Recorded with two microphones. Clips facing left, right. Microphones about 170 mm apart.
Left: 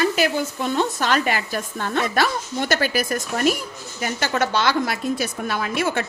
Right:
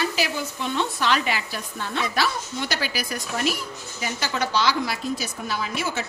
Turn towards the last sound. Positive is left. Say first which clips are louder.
# left 5 dB
turn(degrees=55)  # may be behind; listen again after turning